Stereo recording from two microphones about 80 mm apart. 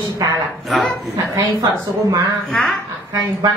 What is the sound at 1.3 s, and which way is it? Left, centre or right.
Speech, right.